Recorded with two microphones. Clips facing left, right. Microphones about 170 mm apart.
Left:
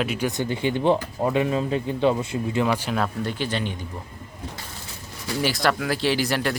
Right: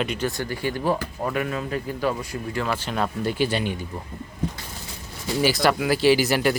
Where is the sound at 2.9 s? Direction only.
Centre (ahead or behind).